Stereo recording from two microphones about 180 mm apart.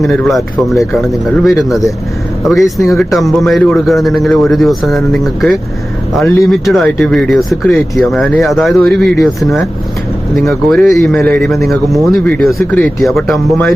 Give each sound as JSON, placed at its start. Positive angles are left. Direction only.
{"t": 0.0, "sound": "speech", "side_deg": 0}
{"t": 10.7, "sound": "speech", "side_deg": 0}